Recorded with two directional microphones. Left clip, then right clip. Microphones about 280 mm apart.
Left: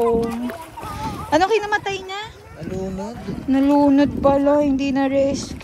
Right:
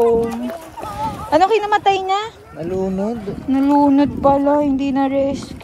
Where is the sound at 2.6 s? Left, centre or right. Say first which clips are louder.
Right 7 dB; right.